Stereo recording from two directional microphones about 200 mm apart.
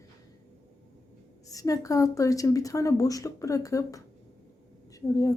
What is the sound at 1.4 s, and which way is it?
Speech, 15° left (ahead or behind).